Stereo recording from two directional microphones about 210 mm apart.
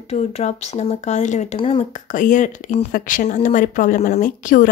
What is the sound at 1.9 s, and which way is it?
Speech, 40° left (ahead or behind).